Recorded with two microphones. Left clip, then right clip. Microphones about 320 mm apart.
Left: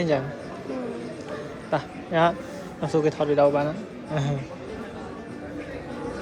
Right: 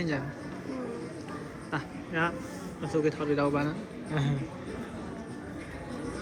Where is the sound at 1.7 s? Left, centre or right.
Centre.